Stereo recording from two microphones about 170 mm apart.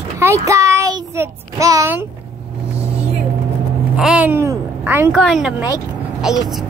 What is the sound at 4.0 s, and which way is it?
Speech, 5° right (ahead or behind).